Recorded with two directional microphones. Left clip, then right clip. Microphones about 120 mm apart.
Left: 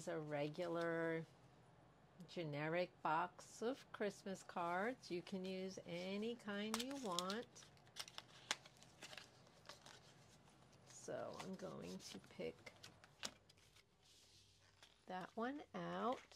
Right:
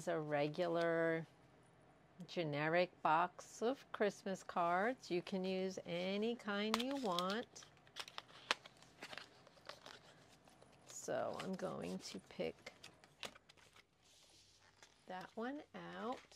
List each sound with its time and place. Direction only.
0.1 s a woman's voice: 15° right (ahead or behind)
2.2 s a woman's voice: 15° right (ahead or behind)
6.7 s speech: 25° right (ahead or behind)
7.6 s a sound: 30° right (ahead or behind)
11.2 s speech: 25° right (ahead or behind); by 13.3 s 10° right (ahead or behind)
15.0 s speech: 15° left (ahead or behind)